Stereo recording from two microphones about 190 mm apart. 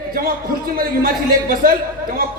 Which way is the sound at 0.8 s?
50° right (ahead or behind).